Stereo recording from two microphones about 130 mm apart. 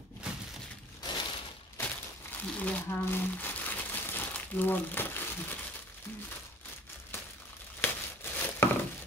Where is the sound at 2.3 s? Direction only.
10° left (ahead or behind).